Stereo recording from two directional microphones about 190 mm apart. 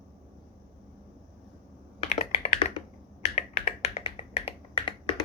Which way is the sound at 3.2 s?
35° left (ahead or behind).